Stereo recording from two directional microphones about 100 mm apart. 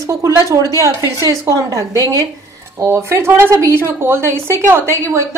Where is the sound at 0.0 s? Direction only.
30° right (ahead or behind).